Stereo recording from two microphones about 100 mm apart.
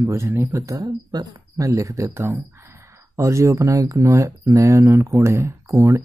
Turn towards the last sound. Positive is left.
turn(degrees=-30)  # may be behind; listen again after turning